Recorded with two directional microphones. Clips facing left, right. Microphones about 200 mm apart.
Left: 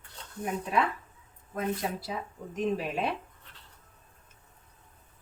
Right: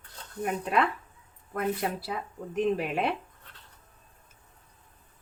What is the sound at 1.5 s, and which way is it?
Speech, 65° right (ahead or behind).